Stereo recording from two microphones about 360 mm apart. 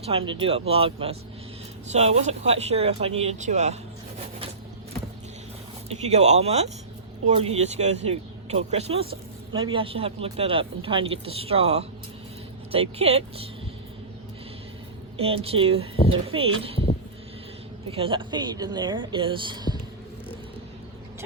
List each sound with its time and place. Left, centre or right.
0.0 s speech: centre
5.9 s speech: centre
15.2 s speech: centre
17.9 s speech: centre